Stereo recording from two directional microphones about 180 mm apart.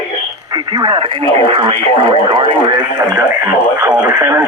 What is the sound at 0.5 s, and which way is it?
Speech, 25° right (ahead or behind).